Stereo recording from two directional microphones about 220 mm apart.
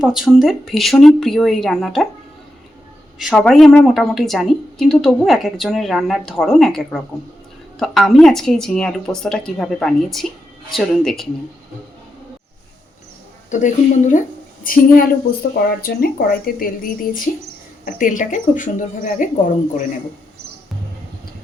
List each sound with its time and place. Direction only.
0.0 s speech: centre (ahead or behind)
3.2 s speech: centre (ahead or behind)
13.5 s a woman's voice: 35° left (ahead or behind)